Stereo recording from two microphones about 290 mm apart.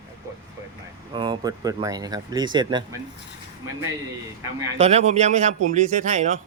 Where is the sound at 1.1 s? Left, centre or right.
Centre.